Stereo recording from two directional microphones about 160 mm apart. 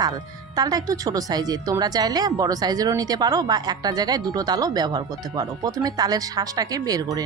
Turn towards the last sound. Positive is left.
turn(degrees=-25)  # may be behind; listen again after turning